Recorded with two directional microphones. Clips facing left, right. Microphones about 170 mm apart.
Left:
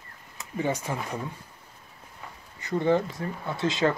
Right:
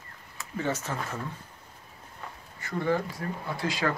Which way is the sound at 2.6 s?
20° left (ahead or behind).